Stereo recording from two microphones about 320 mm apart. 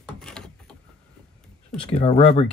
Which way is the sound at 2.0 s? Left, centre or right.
Centre.